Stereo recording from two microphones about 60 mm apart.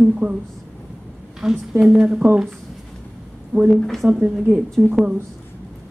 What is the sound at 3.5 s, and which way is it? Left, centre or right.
Speech, right.